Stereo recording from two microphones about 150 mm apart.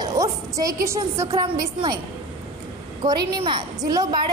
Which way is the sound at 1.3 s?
30° right (ahead or behind).